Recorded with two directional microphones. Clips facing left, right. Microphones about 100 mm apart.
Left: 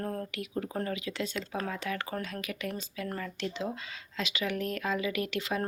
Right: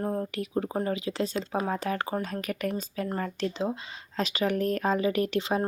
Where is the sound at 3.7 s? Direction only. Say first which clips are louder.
Right 4 dB; 25° right (ahead or behind).